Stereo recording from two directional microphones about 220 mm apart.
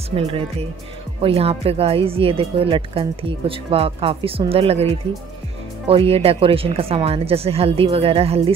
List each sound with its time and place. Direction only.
0.1 s speech: 25° right (ahead or behind)